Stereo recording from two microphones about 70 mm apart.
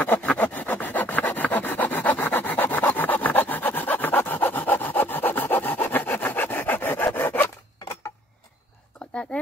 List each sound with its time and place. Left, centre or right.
0.0 s sawing: left
7.2 s rub: left
9.3 s a sound: centre